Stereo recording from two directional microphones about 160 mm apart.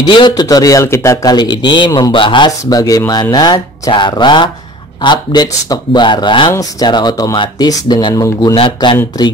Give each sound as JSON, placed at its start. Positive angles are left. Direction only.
{"t": 0.0, "sound": "speech", "side_deg": 25}
{"t": 8.5, "sound": "speech", "side_deg": 30}